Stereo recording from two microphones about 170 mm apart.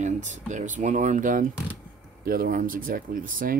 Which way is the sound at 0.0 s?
45° right (ahead or behind).